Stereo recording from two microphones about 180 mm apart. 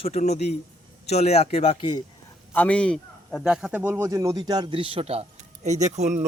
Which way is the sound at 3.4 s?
5° right (ahead or behind).